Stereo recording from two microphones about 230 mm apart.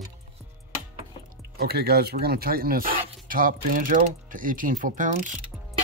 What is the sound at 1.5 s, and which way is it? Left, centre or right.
Speech, right.